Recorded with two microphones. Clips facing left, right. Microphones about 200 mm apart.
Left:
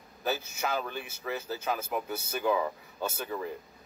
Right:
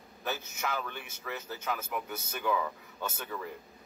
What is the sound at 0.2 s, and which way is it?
A man's voice, 25° left (ahead or behind).